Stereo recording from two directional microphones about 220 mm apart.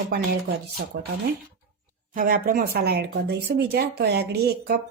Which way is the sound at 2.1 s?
40° right (ahead or behind).